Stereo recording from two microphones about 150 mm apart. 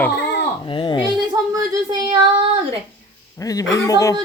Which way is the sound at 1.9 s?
30° right (ahead or behind).